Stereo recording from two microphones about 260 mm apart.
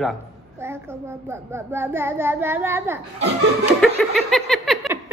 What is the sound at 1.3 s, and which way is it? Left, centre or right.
A child's voice, centre.